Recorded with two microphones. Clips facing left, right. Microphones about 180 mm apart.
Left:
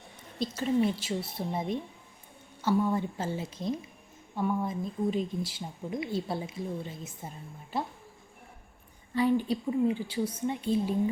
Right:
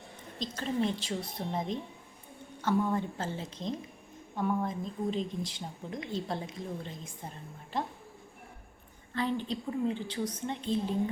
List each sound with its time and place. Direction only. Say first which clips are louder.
0.3 s a woman's voice: left 5 dB; 10° left (ahead or behind)
9.1 s a woman's voice: left 6 dB; 10° left (ahead or behind)